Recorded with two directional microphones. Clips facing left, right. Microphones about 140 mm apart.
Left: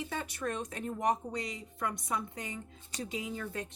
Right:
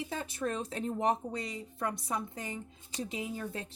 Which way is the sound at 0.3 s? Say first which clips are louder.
Right 2 dB; 25° right (ahead or behind).